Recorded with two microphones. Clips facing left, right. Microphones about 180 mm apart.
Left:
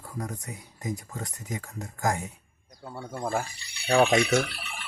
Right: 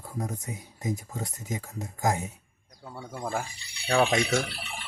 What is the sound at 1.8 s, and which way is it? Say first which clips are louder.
Speech: right 1 dB; 10° right (ahead or behind).